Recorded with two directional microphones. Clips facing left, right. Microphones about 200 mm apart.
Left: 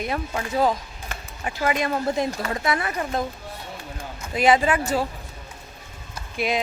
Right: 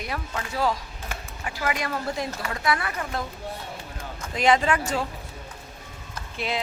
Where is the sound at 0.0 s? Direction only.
25° left (ahead or behind).